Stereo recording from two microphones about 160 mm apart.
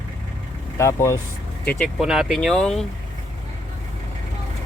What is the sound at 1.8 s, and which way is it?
Speech, 5° right (ahead or behind).